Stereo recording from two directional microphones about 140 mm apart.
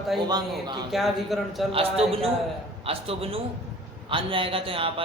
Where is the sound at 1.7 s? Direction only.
45° right (ahead or behind).